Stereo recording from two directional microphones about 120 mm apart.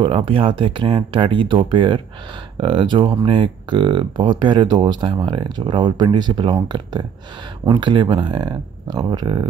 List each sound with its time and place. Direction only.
0.0 s speech: 45° right (ahead or behind)